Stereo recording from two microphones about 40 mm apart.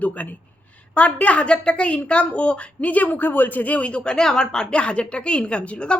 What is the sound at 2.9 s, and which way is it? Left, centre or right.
Speech, left.